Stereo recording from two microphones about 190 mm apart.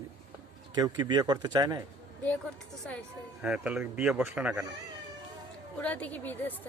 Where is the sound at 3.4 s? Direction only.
5° right (ahead or behind).